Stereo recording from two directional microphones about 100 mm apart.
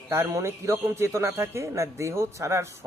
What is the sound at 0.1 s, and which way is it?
Speech, 25° right (ahead or behind).